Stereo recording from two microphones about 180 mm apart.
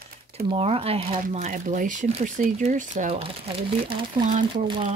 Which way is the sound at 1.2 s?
45° right (ahead or behind).